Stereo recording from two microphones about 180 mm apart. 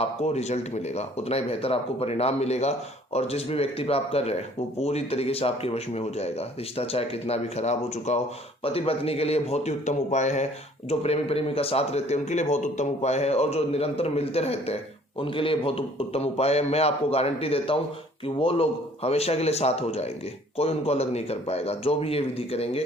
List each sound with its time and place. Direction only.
0.0 s speech: 35° left (ahead or behind)